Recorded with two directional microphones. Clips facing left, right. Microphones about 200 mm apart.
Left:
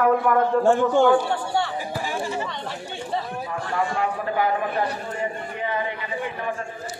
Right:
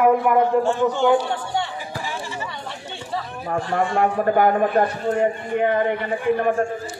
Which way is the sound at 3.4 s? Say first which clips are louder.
Right 4 dB; 50° right (ahead or behind).